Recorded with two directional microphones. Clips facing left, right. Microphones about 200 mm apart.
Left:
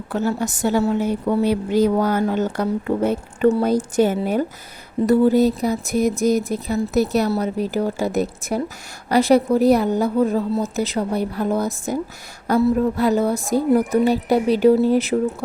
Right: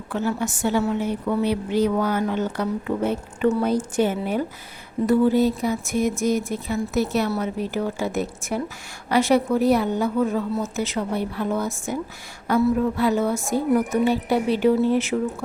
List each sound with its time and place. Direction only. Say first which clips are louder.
0.1 s speech: left 3 dB; 40° left (ahead or behind)